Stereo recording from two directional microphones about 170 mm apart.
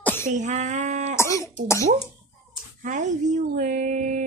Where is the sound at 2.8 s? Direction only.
45° right (ahead or behind).